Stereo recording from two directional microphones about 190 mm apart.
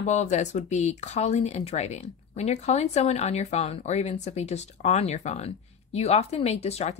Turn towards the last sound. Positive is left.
turn(degrees=35)  # may be behind; listen again after turning